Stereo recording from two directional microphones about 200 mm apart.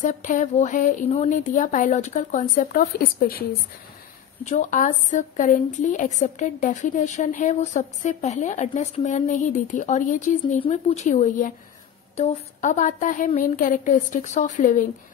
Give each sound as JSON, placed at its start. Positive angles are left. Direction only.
{"t": 0.0, "sound": "a woman's voice", "side_deg": 40}
{"t": 4.5, "sound": "a woman's voice", "side_deg": 40}